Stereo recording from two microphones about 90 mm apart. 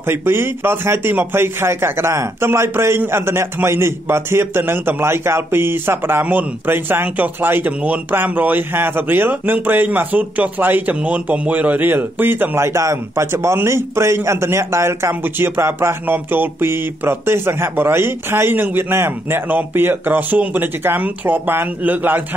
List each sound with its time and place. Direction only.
0.0 s speech: 25° right (ahead or behind)